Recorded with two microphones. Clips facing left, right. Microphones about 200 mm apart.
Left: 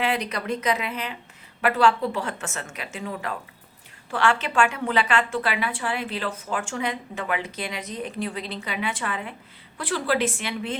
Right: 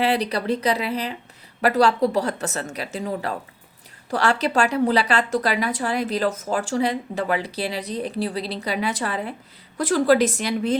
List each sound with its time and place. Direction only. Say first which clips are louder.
0.0 s a woman's voice: right 5 dB; 35° right (ahead or behind)